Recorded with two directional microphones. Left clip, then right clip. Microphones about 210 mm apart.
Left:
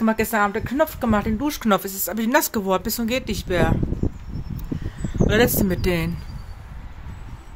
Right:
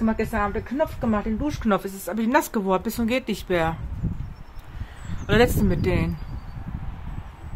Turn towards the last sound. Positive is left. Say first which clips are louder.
# left 2 dB
turn(degrees=5)  # may be behind; listen again after turning